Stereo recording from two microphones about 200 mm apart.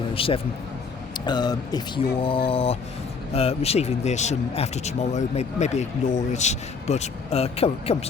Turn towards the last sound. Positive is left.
turn(degrees=30)  # may be behind; listen again after turning